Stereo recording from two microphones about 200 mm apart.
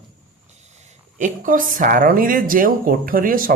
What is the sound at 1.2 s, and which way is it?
A woman's voice, 40° right (ahead or behind).